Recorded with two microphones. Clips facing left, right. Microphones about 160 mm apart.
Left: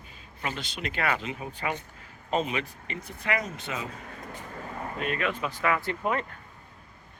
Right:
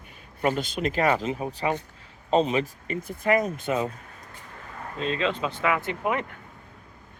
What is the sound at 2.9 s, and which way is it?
Speech, 45° right (ahead or behind).